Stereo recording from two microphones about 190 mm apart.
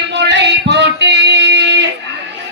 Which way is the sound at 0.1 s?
70° right (ahead or behind).